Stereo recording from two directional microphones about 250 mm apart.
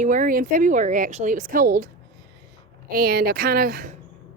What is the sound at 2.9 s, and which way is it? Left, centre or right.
Speech, right.